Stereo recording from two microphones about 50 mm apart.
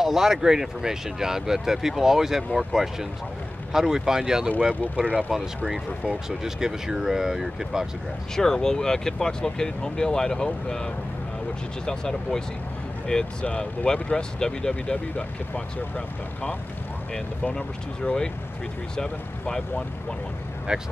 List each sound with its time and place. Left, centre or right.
0.0 s speech: centre; by 6.1 s right
6.2 s speech: centre
8.4 s speech: centre
17.6 s speech: centre